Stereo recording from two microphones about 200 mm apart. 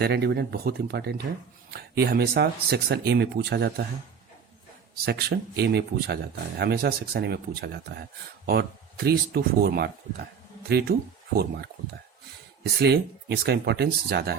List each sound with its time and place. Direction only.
0.0 s speech: 55° right (ahead or behind)
5.0 s speech: 55° right (ahead or behind)
12.8 s speech: 55° right (ahead or behind)